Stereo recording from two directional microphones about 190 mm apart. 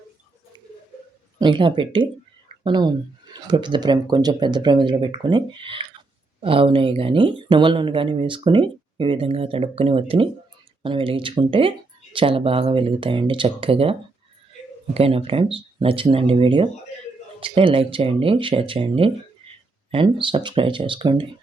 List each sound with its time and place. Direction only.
1.4 s speech: 25° right (ahead or behind)
14.9 s speech: 30° right (ahead or behind)